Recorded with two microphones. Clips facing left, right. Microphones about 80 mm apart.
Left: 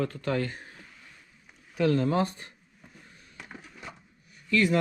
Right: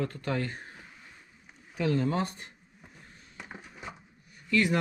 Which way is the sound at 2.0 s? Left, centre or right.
Left.